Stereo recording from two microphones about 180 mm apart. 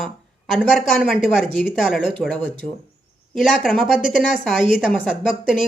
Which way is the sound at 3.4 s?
Centre (ahead or behind).